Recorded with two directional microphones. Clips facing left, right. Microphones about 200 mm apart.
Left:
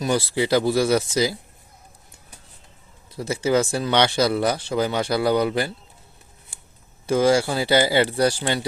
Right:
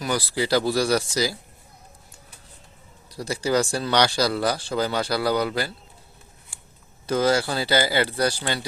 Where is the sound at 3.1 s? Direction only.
20° left (ahead or behind).